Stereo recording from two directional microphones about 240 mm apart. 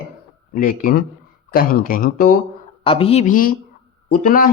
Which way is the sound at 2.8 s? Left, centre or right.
Left.